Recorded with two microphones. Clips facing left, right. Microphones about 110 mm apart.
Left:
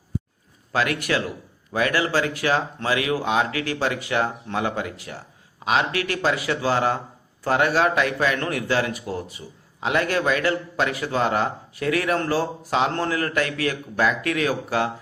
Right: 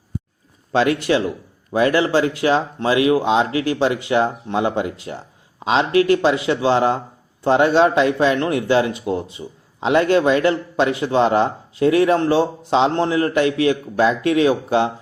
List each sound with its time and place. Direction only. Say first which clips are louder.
0.7 s speech: right 6 dB; 25° right (ahead or behind)